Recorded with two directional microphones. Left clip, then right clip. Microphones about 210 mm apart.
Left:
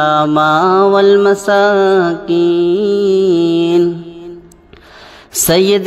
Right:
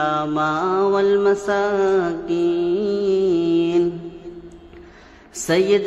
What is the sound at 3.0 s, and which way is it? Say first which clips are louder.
Music: left 7 dB; 10° left (ahead or behind).